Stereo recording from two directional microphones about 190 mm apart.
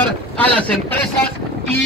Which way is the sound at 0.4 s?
5° left (ahead or behind).